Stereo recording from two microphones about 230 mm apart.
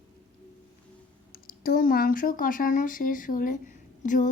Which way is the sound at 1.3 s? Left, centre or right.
Left.